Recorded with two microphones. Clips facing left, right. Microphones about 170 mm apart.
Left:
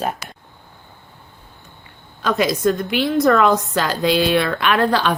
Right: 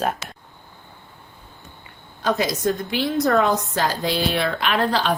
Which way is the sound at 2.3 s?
60° left (ahead or behind).